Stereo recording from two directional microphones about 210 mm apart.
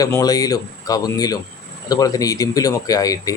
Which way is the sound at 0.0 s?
15° left (ahead or behind).